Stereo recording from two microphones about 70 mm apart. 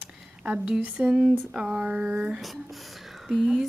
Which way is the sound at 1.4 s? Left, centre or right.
Centre.